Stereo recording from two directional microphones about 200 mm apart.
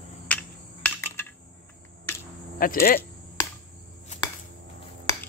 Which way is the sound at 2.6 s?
45° left (ahead or behind).